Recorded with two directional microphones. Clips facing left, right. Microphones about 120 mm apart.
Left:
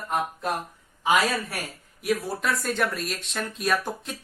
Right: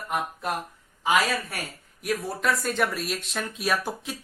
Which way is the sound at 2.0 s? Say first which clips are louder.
Left 1 dB; centre (ahead or behind).